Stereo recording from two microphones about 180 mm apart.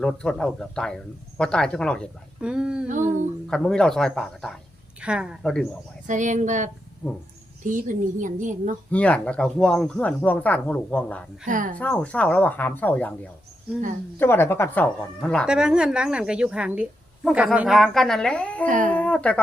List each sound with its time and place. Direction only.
0.0 s a woman's voice: 5° left (ahead or behind)
6.1 s a woman's voice: 45° right (ahead or behind)
7.0 s a woman's voice: 5° left (ahead or behind)
7.6 s a woman's voice: 45° right (ahead or behind)
8.9 s speech: 5° left (ahead or behind)
11.4 s a woman's voice: 45° right (ahead or behind)
11.8 s speech: 10° left (ahead or behind)
15.2 s a woman's voice: centre (ahead or behind)
18.9 s a sound: 5° left (ahead or behind)